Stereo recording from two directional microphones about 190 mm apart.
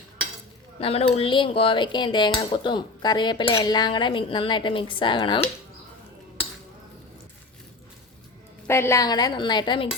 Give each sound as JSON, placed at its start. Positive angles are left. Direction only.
{"t": 0.8, "sound": "speech", "side_deg": 30}
{"t": 8.6, "sound": "speech", "side_deg": 15}